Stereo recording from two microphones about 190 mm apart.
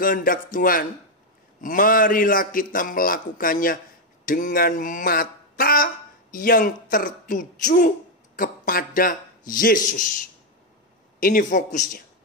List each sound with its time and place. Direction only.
0.0 s a man's voice: 45° left (ahead or behind)